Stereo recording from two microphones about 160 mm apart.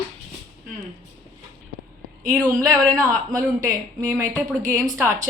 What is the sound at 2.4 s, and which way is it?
Speech, 20° right (ahead or behind).